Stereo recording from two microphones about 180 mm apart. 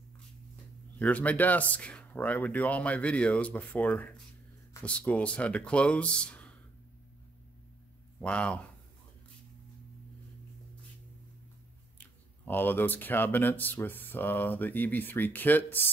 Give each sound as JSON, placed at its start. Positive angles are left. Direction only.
{"t": 0.9, "sound": "speech", "side_deg": 10}
{"t": 8.2, "sound": "speech", "side_deg": 5}
{"t": 12.0, "sound": "speech", "side_deg": 10}